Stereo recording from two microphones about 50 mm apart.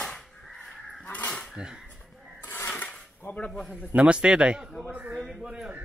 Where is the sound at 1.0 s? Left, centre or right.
Left.